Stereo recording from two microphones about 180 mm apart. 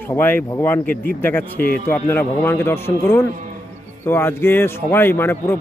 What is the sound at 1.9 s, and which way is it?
A man's voice, 15° left (ahead or behind).